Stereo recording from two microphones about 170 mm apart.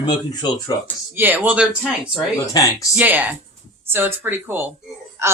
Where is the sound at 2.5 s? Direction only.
20° left (ahead or behind).